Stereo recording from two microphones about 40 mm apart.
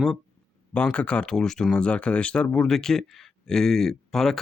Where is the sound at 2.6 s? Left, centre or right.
Centre.